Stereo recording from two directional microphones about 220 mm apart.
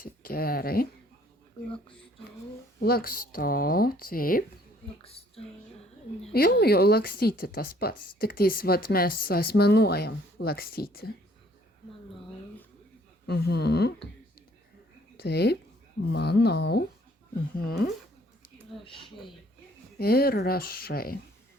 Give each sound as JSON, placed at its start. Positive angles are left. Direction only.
{"t": 0.0, "sound": "speech", "side_deg": 40}
{"t": 2.8, "sound": "speech", "side_deg": 40}
{"t": 5.0, "sound": "music", "side_deg": 25}
{"t": 6.3, "sound": "speech", "side_deg": 45}
{"t": 13.2, "sound": "speech", "side_deg": 45}
{"t": 15.2, "sound": "speech", "side_deg": 50}
{"t": 18.9, "sound": "speech", "side_deg": 25}
{"t": 20.0, "sound": "speech", "side_deg": 45}